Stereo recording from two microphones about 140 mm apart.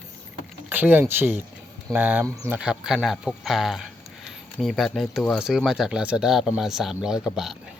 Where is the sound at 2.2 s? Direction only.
25° right (ahead or behind).